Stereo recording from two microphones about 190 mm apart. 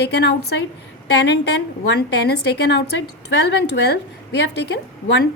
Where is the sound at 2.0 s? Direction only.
60° left (ahead or behind).